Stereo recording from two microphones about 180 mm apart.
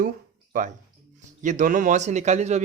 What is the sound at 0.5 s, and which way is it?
A man's voice, 50° right (ahead or behind).